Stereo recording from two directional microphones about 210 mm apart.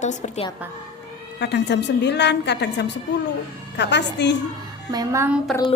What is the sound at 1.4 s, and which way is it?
A woman's voice, 55° left (ahead or behind).